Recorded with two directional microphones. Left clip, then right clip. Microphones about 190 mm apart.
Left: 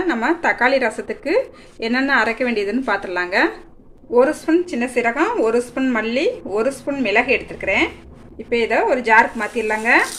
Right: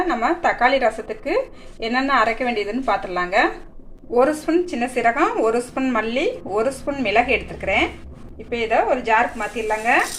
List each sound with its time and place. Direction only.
0.1 s a woman's voice: 25° left (ahead or behind)
4.1 s a woman's voice: 10° left (ahead or behind)
8.5 s a woman's voice: 35° left (ahead or behind)